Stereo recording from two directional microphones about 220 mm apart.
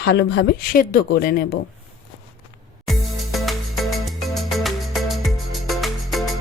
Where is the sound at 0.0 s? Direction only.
45° left (ahead or behind).